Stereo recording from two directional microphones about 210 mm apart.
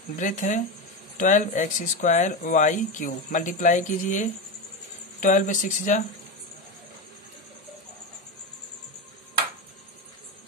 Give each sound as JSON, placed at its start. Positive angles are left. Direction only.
{"t": 0.2, "sound": "speech", "side_deg": 35}